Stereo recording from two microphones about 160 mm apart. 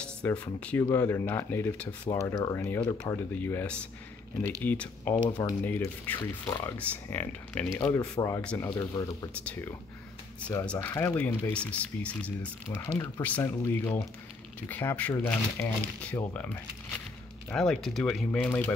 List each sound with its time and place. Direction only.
0.0 s speech: 5° left (ahead or behind)
8.6 s speech: 20° left (ahead or behind)
9.4 s speech: 10° left (ahead or behind)